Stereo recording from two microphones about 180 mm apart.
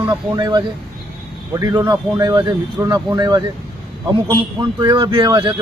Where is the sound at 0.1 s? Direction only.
20° right (ahead or behind).